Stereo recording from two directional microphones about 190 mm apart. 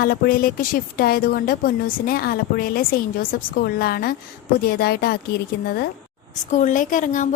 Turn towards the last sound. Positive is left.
turn(degrees=40)  # may be behind; listen again after turning